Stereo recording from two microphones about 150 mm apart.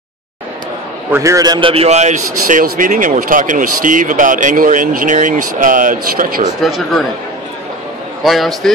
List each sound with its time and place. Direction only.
1.1 s a man's voice: 20° right (ahead or behind); by 6.5 s 65° right (ahead or behind)
6.6 s a man's voice: centre (ahead or behind)
8.2 s a man's voice: centre (ahead or behind)